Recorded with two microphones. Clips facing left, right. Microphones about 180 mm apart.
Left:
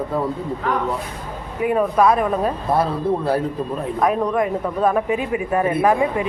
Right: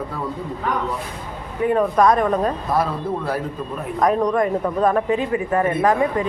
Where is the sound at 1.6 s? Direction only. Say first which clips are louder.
Even; 10° left (ahead or behind).